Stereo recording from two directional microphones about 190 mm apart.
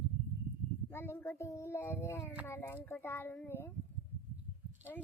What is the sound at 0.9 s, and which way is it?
A child's voice, 10° left (ahead or behind).